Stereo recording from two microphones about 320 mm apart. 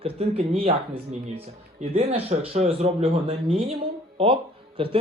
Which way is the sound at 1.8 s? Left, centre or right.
Centre.